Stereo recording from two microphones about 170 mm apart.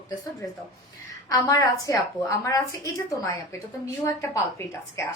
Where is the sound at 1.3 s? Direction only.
20° left (ahead or behind).